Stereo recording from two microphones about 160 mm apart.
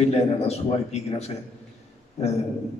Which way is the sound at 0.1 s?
40° left (ahead or behind).